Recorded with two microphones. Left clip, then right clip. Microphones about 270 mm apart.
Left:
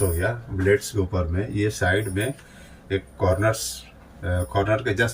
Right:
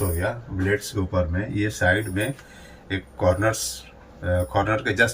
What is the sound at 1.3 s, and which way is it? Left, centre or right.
Speech, centre.